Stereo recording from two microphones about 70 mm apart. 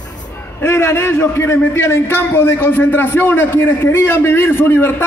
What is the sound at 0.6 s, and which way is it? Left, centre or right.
A man's voice, left.